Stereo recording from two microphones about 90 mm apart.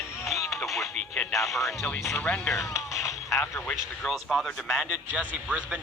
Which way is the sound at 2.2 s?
15° left (ahead or behind).